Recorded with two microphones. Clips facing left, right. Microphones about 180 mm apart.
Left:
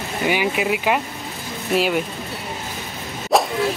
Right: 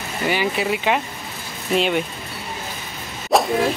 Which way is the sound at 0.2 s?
10° left (ahead or behind).